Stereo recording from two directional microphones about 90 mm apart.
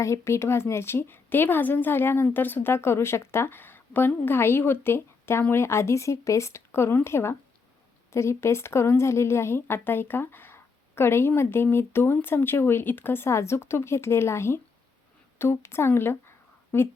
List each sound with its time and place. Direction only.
0.0 s a woman's voice: 30° left (ahead or behind)